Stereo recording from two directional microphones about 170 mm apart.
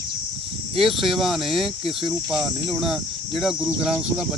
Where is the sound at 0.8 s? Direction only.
Centre (ahead or behind).